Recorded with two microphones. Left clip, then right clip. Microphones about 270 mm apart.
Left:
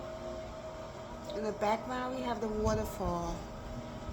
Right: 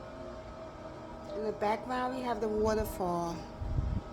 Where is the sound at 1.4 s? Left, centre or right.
Centre.